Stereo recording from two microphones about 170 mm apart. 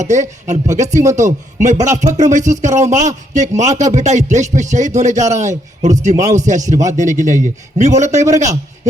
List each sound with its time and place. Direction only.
0.0 s speech: 45° right (ahead or behind)
6.1 s speech: 20° right (ahead or behind)
6.4 s speech: 45° right (ahead or behind)